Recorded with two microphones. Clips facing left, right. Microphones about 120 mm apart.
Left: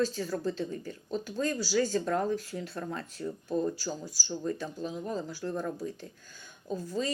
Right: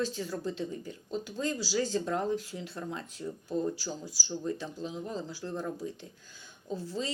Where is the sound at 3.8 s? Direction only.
20° left (ahead or behind).